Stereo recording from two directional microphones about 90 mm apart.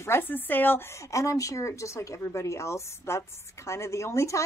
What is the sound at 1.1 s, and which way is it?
A woman's voice, 35° left (ahead or behind).